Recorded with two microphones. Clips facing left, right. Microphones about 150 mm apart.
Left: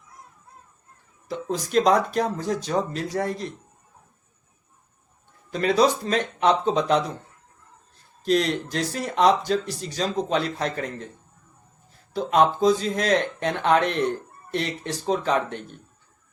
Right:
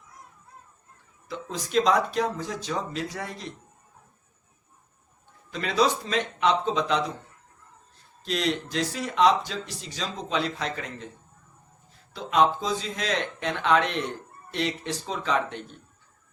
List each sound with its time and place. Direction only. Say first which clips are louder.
1.3 s speech: left 4 dB; 45° left (ahead or behind)
5.5 s speech: left 4 dB; 45° left (ahead or behind)
8.2 s speech: left 5 dB; 45° left (ahead or behind)
12.1 s speech: left 3 dB; 50° left (ahead or behind)